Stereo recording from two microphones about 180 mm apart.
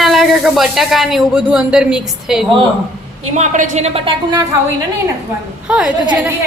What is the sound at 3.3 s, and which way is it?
A woman's voice, 40° right (ahead or behind).